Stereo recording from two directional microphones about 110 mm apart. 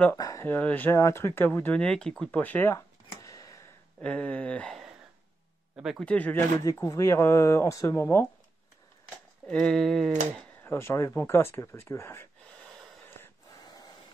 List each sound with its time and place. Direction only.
0.2 s speech: 30° left (ahead or behind)
0.5 s speech: 15° left (ahead or behind)
0.9 s speech: 25° left (ahead or behind)
2.7 s a sound: 30° left (ahead or behind)
4.0 s speech: 10° left (ahead or behind)
5.8 s a sound: 5° right (ahead or behind)
6.0 s speech: 15° left (ahead or behind)
6.6 s speech: 30° left (ahead or behind)
9.5 s a sound: 5° left (ahead or behind)
10.6 s speech: 25° left (ahead or behind)
12.4 s gasp: centre (ahead or behind)
13.7 s a sound: 35° left (ahead or behind)